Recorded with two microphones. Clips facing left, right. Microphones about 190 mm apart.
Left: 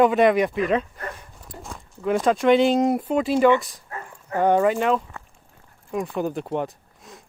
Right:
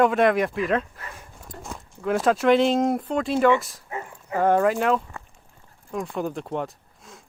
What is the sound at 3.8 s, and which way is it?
Dog, 15° right (ahead or behind).